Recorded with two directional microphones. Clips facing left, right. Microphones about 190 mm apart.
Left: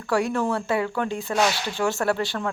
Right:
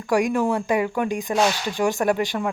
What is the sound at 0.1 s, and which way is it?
Speech, 15° right (ahead or behind).